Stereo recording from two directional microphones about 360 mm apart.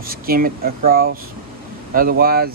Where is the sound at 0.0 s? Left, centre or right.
Right.